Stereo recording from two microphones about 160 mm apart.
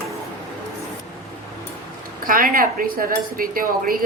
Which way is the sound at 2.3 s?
60° right (ahead or behind).